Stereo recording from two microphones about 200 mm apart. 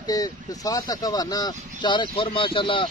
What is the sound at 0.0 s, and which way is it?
Speech, 20° left (ahead or behind).